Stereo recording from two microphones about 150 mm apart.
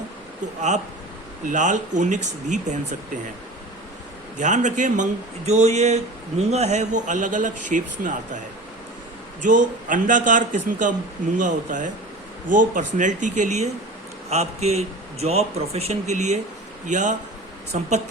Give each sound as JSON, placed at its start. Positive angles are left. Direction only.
{"t": 1.5, "sound": "a man's voice", "side_deg": -55}
{"t": 4.4, "sound": "a man's voice", "side_deg": -55}
{"t": 9.4, "sound": "a man's voice", "side_deg": -60}